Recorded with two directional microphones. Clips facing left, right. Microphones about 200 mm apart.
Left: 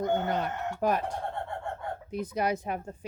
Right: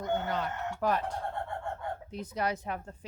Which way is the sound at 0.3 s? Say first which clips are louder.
Left 3 dB; 15° left (ahead or behind).